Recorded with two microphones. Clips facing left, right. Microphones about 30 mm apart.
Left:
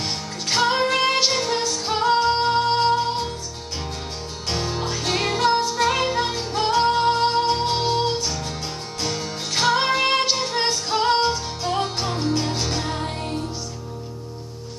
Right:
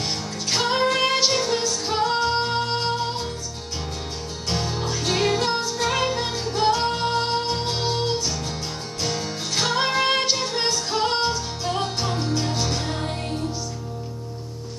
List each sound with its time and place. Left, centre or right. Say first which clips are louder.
0.0 s music: even; centre
4.5 s music: left 1 dB; centre
4.8 s music: right 3 dB; centre
9.6 s music: left 3 dB; centre